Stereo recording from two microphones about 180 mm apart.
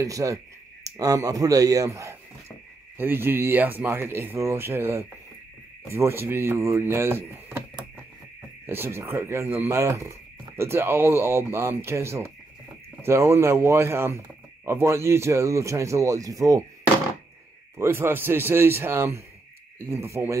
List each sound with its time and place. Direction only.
0.0 s speech: 20° right (ahead or behind)
8.6 s speech: 15° right (ahead or behind)
17.7 s speech: 15° right (ahead or behind)